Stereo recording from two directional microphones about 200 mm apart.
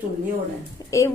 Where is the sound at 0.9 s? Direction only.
15° left (ahead or behind).